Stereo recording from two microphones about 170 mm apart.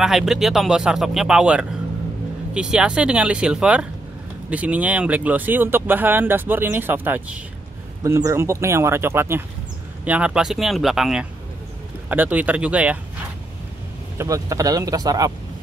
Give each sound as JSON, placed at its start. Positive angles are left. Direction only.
{"t": 0.0, "sound": "speech", "side_deg": -5}
{"t": 14.1, "sound": "speech", "side_deg": -20}